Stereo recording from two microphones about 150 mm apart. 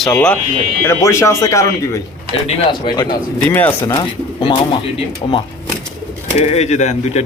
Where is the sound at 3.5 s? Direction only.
10° left (ahead or behind).